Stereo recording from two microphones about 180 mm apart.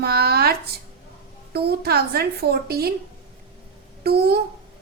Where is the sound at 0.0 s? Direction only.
60° right (ahead or behind).